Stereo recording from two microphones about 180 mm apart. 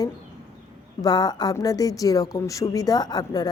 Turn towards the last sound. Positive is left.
turn(degrees=20)  # may be behind; listen again after turning